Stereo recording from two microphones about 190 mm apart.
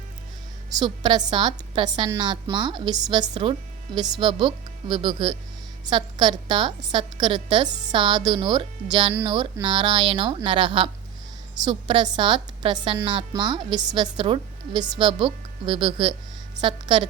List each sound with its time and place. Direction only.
0.8 s a woman's voice: 20° right (ahead or behind)